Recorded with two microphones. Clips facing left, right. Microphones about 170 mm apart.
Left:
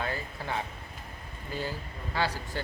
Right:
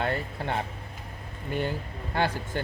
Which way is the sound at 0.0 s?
60° right (ahead or behind).